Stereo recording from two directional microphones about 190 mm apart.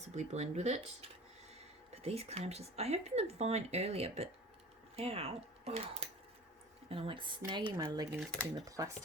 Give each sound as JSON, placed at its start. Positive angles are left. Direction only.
{"t": 0.0, "sound": "speech", "side_deg": -35}
{"t": 2.0, "sound": "speech", "side_deg": -35}